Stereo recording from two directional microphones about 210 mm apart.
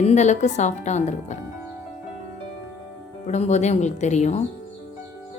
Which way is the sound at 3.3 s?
30° left (ahead or behind).